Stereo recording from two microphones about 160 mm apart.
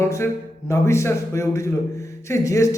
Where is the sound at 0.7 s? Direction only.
15° left (ahead or behind).